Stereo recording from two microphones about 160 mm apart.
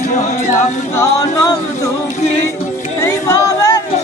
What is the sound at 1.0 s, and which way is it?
Music, 20° left (ahead or behind).